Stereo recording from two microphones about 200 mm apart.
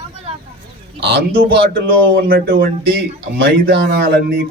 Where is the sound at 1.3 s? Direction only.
45° right (ahead or behind).